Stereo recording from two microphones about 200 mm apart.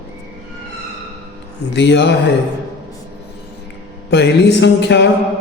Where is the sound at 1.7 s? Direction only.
60° left (ahead or behind).